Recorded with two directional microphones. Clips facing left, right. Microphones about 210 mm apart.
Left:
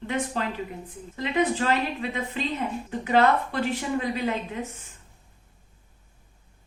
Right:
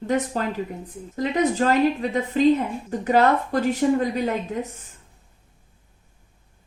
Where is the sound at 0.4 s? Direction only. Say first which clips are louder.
Right 4 dB; 45° right (ahead or behind).